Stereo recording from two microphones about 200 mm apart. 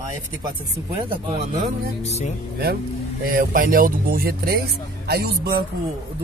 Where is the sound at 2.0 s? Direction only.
35° left (ahead or behind).